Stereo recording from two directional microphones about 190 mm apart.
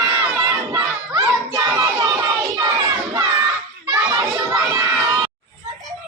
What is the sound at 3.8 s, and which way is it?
Children playing, 10° right (ahead or behind).